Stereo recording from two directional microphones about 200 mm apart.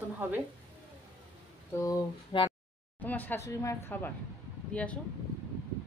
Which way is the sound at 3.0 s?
10° left (ahead or behind).